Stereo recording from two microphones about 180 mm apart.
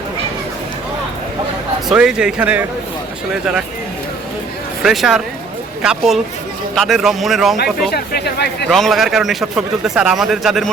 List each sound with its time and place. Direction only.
1.9 s a man's voice: 5° right (ahead or behind)
4.8 s a man's voice: centre (ahead or behind)
7.6 s speech: 60° left (ahead or behind)
8.7 s a man's voice: centre (ahead or behind)